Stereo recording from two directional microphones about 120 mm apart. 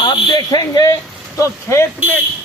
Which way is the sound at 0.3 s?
35° left (ahead or behind).